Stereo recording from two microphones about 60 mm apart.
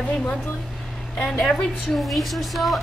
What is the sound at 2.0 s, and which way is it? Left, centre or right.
Speech, centre.